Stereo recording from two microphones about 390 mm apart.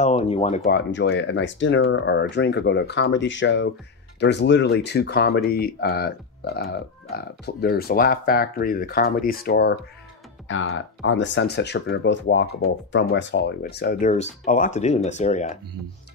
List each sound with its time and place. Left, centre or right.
0.0 s speech: centre